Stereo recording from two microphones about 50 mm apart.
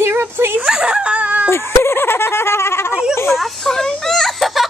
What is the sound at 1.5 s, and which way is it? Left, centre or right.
Speech, left.